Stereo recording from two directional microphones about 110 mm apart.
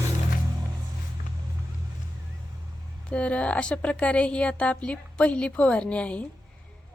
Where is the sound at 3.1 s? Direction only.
10° left (ahead or behind).